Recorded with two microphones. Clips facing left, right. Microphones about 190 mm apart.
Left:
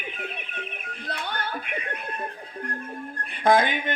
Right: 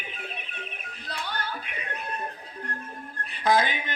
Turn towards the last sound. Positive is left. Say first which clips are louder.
# left 3 dB
turn(degrees=55)  # may be behind; listen again after turning